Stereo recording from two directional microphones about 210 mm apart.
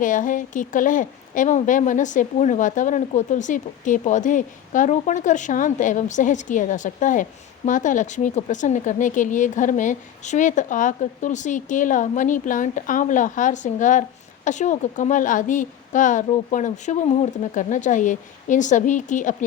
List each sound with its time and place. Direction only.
0.0 s a woman's voice: 40° left (ahead or behind)